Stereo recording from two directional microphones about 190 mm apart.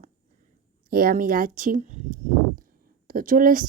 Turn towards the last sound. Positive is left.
turn(degrees=-45)  # may be behind; listen again after turning